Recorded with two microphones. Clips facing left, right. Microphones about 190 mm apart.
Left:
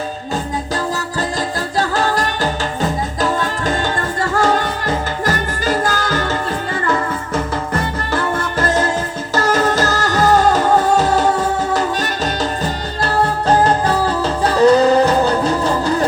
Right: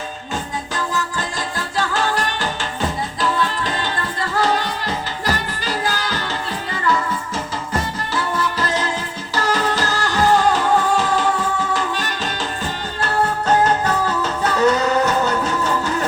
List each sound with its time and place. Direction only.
1.8 s music: 40° left (ahead or behind)
8.1 s music: 50° left (ahead or behind); by 16.0 s 35° left (ahead or behind)